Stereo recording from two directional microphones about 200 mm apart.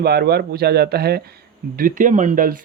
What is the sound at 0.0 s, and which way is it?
Speech, 55° right (ahead or behind).